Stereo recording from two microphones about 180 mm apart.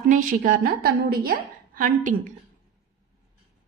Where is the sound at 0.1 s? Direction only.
50° right (ahead or behind).